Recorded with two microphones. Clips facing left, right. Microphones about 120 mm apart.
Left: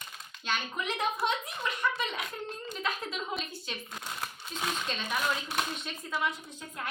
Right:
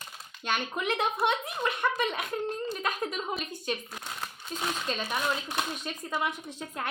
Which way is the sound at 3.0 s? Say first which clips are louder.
Right 3 dB; 50° right (ahead or behind).